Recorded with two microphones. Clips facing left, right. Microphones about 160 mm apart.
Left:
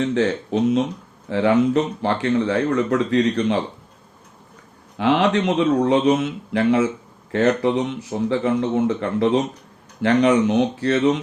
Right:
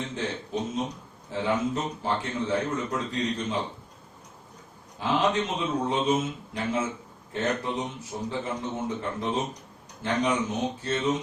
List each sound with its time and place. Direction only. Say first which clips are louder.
0.0 s speech: left 12 dB; 75° left (ahead or behind)
4.9 s speech: left 7 dB; 70° left (ahead or behind)